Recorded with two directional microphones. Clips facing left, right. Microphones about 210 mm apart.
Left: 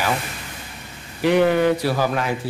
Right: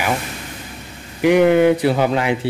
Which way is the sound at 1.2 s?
15° right (ahead or behind).